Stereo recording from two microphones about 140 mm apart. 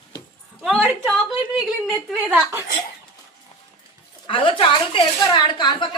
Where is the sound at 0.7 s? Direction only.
10° right (ahead or behind).